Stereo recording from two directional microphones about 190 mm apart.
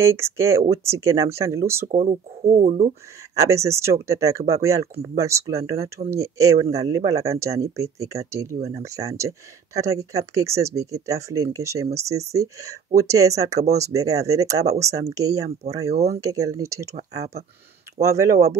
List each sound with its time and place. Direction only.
0.0 s speech: 15° right (ahead or behind)
2.5 s speech: 40° right (ahead or behind)
3.3 s speech: 15° right (ahead or behind)
18.0 s speech: 15° right (ahead or behind)